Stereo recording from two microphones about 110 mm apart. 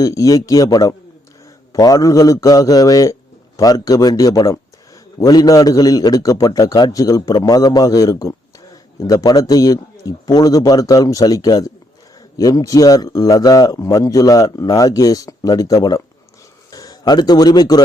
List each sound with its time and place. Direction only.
0.0 s a man's voice: 30° left (ahead or behind)